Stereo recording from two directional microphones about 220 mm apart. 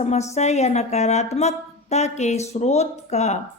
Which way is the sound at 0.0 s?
30° left (ahead or behind).